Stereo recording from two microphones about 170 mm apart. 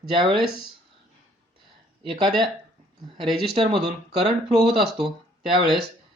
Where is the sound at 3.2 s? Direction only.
Centre (ahead or behind).